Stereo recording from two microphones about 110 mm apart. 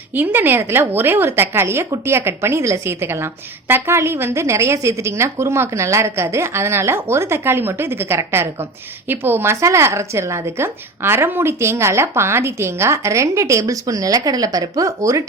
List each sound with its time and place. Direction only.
0.1 s a woman's voice: 15° right (ahead or behind)